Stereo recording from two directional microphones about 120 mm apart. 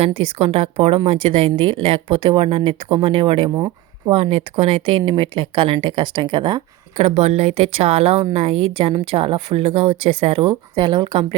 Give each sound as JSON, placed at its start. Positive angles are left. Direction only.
{"t": 0.0, "sound": "a woman's voice", "side_deg": -50}
{"t": 3.5, "sound": "speech", "side_deg": -35}
{"t": 4.1, "sound": "a woman's voice", "side_deg": -55}
{"t": 6.9, "sound": "a woman's voice", "side_deg": -60}